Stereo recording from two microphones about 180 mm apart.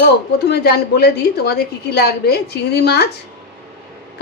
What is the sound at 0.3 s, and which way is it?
A woman's voice, 65° left (ahead or behind).